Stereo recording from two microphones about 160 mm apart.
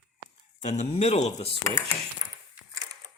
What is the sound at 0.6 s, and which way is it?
Speech, 45° left (ahead or behind).